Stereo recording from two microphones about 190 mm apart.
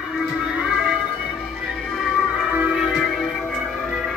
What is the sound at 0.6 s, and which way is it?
Music, centre (ahead or behind).